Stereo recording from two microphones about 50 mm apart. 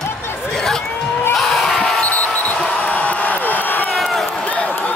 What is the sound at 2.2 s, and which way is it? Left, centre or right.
Basketball bounce, left.